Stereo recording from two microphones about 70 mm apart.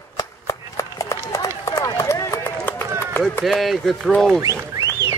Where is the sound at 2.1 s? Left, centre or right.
Left.